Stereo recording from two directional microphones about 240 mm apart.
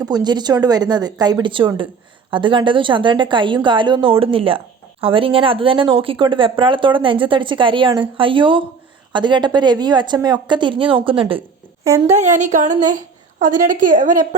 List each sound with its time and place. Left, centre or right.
0.0 s a woman's voice: centre
12.1 s speech: right